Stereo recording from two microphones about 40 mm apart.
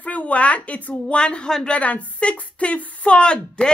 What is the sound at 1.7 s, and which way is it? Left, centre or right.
Speech, left.